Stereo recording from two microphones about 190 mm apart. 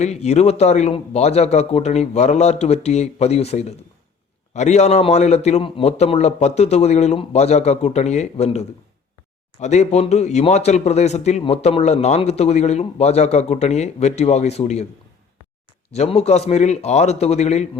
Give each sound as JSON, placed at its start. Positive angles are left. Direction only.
{"t": 0.0, "sound": "speech", "side_deg": 35}
{"t": 15.9, "sound": "speech", "side_deg": 35}